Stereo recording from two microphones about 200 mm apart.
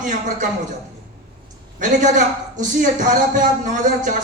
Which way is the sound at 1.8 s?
40° right (ahead or behind).